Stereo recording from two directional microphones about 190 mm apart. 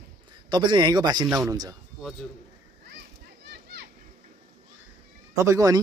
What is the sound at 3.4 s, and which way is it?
Children playing, 60° right (ahead or behind).